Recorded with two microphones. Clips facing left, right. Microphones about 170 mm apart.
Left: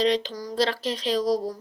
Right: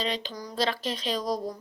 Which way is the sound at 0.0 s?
90° left.